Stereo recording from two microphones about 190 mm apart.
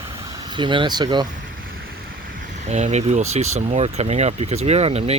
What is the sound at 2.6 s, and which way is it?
Speech, 35° right (ahead or behind).